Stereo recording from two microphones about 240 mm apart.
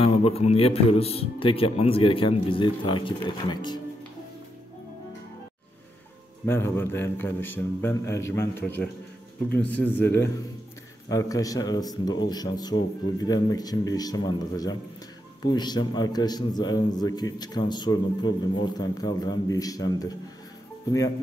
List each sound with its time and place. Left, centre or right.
0.0 s a man's voice: left
6.4 s a man's voice: centre